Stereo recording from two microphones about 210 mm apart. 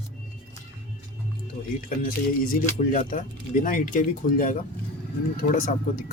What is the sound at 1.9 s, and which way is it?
Speech, 45° left (ahead or behind).